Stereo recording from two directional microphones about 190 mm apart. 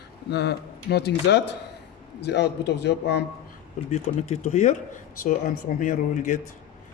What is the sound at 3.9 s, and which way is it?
Speech, 35° left (ahead or behind).